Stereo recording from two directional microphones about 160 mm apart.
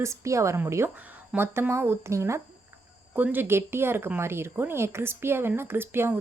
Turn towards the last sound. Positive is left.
turn(degrees=-15)  # may be behind; listen again after turning